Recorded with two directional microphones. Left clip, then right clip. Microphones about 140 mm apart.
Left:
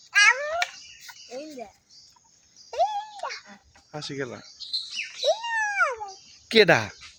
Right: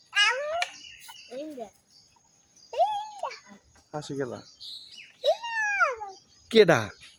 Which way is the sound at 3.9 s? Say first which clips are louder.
Even; centre (ahead or behind).